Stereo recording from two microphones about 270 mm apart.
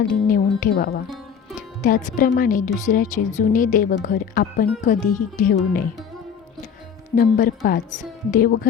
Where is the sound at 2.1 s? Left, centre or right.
Left.